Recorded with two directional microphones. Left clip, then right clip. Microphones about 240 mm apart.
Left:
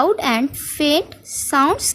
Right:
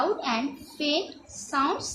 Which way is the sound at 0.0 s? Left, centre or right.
Left.